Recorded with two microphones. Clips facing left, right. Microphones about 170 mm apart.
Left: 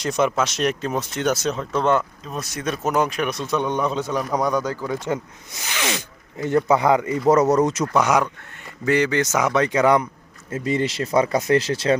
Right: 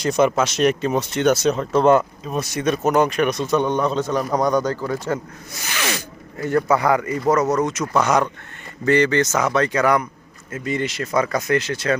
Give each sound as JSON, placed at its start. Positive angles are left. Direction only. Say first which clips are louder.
{"t": 0.0, "sound": "speech", "louder": "right 3 dB", "side_deg": 0}
{"t": 4.9, "sound": "speech", "louder": "right 1 dB", "side_deg": 20}
{"t": 7.9, "sound": "a man's voice", "louder": "right 2 dB", "side_deg": 10}